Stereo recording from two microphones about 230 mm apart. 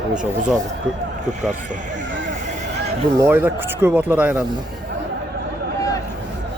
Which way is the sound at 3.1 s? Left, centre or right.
Centre.